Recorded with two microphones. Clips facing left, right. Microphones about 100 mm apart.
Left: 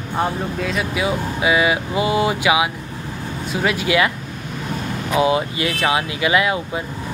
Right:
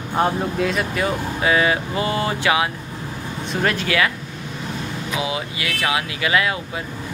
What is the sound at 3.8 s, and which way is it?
Speech, 20° left (ahead or behind).